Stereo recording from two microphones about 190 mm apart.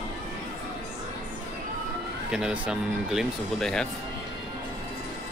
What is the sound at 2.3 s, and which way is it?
Speech, 5° right (ahead or behind).